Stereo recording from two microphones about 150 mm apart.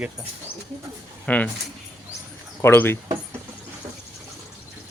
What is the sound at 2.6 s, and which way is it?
Speech, 15° left (ahead or behind).